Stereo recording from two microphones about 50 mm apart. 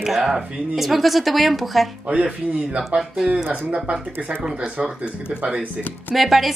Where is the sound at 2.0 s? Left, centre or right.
Centre.